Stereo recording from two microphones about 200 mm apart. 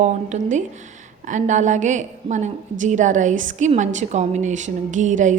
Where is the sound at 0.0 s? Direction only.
35° right (ahead or behind).